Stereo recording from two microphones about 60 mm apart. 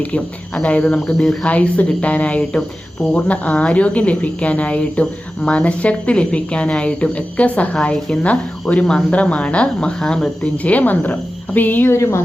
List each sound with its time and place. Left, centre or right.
0.6 s speech: left
1.5 s speech: left
7.9 s speech: centre
8.2 s speech: left
10.6 s speech: left
11.9 s speech: left